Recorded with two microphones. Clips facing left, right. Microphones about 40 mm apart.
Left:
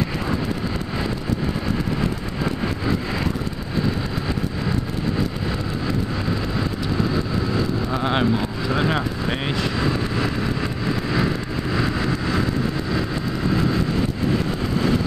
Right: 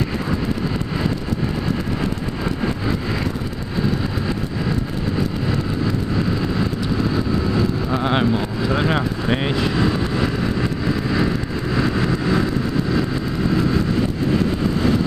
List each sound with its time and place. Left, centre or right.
7.5 s vehicle: centre
11.7 s vehicle: centre